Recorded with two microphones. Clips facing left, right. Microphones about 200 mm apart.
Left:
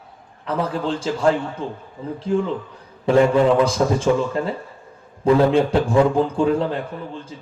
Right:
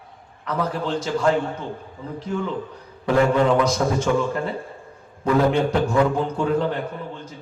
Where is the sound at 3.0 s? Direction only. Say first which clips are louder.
Left 3 dB; 30° left (ahead or behind).